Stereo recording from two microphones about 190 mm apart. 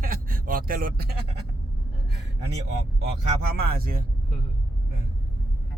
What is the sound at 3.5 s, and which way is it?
Speech, 50° right (ahead or behind).